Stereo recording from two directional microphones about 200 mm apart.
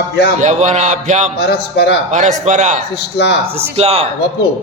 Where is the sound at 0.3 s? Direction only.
35° right (ahead or behind).